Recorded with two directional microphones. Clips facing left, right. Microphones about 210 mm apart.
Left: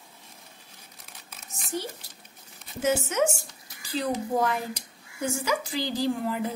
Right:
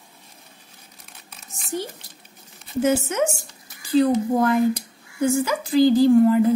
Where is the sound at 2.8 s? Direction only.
55° right (ahead or behind).